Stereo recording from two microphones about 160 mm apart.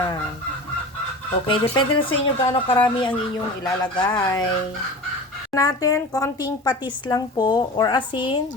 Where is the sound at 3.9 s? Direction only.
25° left (ahead or behind).